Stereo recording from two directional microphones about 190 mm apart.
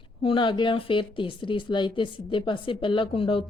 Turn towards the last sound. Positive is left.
turn(degrees=30)  # may be behind; listen again after turning